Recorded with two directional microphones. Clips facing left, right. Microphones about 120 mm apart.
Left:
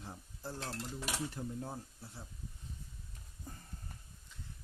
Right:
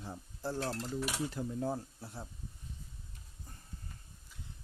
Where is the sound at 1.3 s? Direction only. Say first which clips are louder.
Right 6 dB; 90° right.